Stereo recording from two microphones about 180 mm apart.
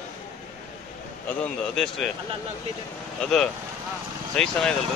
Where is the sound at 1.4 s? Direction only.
5° left (ahead or behind).